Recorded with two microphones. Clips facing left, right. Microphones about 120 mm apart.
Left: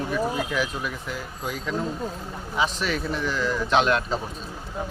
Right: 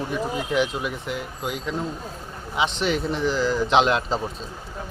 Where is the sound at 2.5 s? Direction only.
25° right (ahead or behind).